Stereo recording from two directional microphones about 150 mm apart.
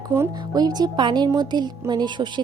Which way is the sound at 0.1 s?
20° right (ahead or behind).